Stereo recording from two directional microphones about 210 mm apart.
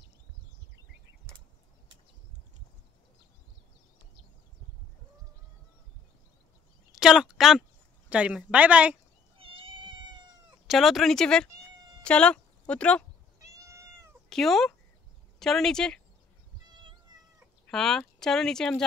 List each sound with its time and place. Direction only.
6.9 s a sound: centre (ahead or behind)
8.1 s speech: 5° right (ahead or behind)
9.4 s cat: 25° right (ahead or behind)
10.7 s speech: centre (ahead or behind)
13.4 s cat: 15° right (ahead or behind)
14.3 s speech: centre (ahead or behind)
17.6 s speech: centre (ahead or behind)